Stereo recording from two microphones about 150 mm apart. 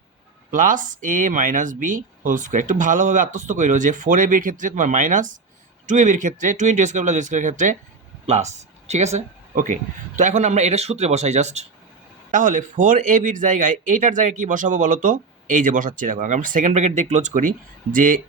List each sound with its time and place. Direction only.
0.5 s speech: 60° right (ahead or behind)
8.9 s speech: 45° right (ahead or behind)
12.3 s speech: 60° right (ahead or behind)